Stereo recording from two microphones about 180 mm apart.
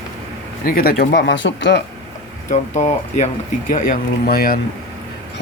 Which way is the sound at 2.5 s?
40° left (ahead or behind).